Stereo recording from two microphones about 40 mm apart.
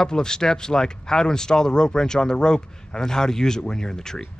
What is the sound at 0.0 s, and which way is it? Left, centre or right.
Speech, centre.